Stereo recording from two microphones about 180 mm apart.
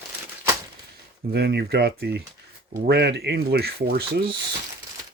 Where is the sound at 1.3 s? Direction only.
70° right (ahead or behind).